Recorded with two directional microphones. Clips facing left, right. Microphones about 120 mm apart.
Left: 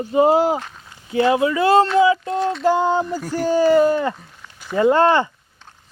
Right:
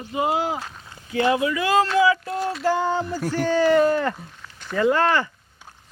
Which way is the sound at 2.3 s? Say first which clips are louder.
Left 5 dB; 5° right (ahead or behind).